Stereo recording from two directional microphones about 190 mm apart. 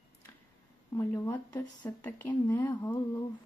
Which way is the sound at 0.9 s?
15° left (ahead or behind).